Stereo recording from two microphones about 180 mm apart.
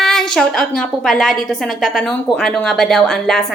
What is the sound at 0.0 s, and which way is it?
A woman's voice, centre (ahead or behind).